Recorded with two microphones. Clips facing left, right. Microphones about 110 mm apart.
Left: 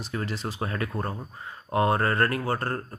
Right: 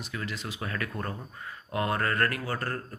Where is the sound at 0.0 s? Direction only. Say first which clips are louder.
Left 5 dB; 35° left (ahead or behind).